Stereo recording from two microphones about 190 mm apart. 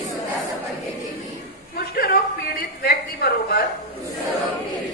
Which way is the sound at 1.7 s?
55° left (ahead or behind).